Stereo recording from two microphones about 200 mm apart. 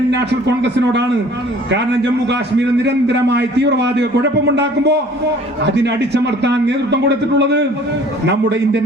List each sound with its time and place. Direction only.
0.1 s a man's voice: 60° right (ahead or behind)